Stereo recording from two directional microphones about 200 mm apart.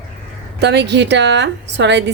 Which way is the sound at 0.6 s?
60° right (ahead or behind).